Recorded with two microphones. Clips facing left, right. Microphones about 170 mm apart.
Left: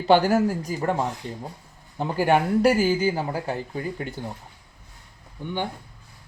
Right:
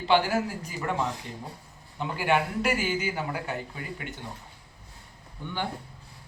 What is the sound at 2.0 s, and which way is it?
Speech, 45° left (ahead or behind).